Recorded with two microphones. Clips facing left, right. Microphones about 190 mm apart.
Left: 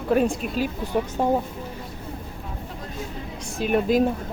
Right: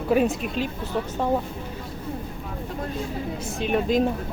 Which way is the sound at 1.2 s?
15° left (ahead or behind).